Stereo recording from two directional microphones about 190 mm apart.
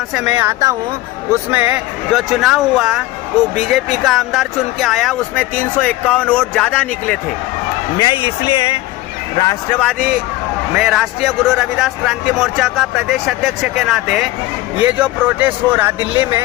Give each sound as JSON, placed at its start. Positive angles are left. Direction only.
{"t": 0.1, "sound": "speech", "side_deg": -10}
{"t": 7.9, "sound": "speech", "side_deg": 25}
{"t": 9.8, "sound": "speech", "side_deg": 0}